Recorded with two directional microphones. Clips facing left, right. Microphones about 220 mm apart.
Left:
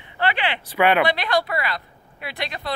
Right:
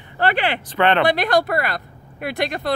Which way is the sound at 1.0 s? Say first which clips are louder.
Right 4 dB; 45° right (ahead or behind).